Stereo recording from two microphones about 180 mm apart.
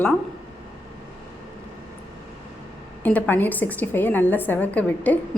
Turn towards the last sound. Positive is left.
turn(degrees=10)  # may be behind; listen again after turning